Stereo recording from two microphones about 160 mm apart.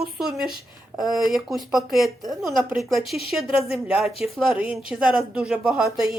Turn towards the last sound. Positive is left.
turn(degrees=-5)  # may be behind; listen again after turning